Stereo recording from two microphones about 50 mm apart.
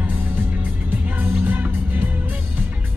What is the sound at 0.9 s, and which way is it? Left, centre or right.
Music, right.